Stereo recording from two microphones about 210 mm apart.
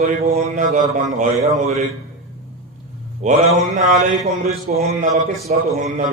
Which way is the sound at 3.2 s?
35° right (ahead or behind).